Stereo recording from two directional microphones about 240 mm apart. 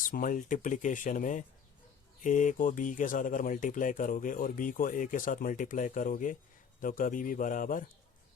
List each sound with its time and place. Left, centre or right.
0.0 s speech: left